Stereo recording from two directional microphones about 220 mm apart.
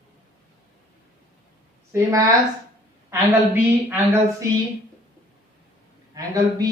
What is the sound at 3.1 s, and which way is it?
Speech, 10° right (ahead or behind).